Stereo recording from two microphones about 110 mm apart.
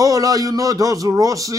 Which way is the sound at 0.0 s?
30° right (ahead or behind).